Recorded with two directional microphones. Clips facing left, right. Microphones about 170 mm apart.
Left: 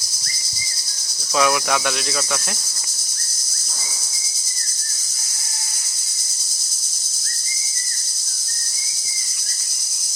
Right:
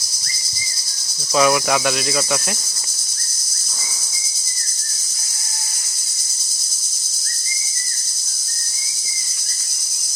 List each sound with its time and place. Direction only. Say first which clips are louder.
1.4 s cricket: right 3 dB; 5° right (ahead or behind)